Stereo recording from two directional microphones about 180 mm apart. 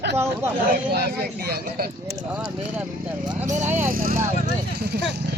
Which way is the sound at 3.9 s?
55° right (ahead or behind).